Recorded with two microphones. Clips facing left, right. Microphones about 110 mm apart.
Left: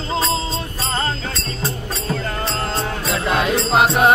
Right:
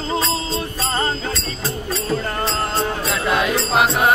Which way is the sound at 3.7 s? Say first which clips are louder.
Left 2 dB; 25° left (ahead or behind).